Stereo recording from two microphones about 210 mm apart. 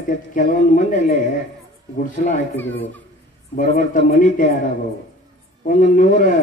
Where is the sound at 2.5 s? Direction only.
10° left (ahead or behind).